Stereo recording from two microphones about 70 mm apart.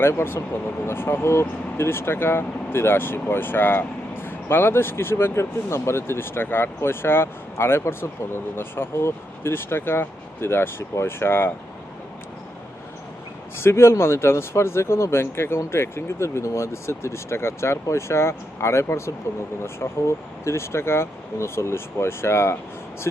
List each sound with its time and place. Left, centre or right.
0.0 s speech: left
13.6 s speech: left